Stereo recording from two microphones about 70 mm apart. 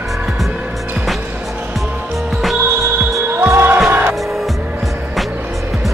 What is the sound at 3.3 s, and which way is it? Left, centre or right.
Music, right.